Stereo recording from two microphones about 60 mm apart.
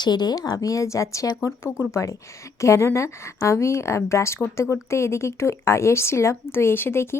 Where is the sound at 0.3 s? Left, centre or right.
Left.